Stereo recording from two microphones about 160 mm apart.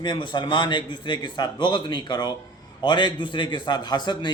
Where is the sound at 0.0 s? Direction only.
30° left (ahead or behind).